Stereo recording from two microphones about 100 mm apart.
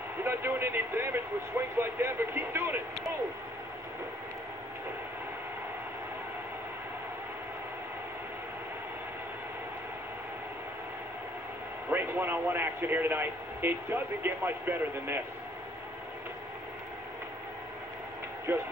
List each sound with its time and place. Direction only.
0.2 s a man's voice: 20° right (ahead or behind)
11.9 s a man's voice: 20° right (ahead or behind)
18.5 s a man's voice: 20° right (ahead or behind)